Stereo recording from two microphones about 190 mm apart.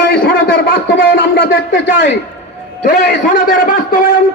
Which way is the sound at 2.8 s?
50° left (ahead or behind).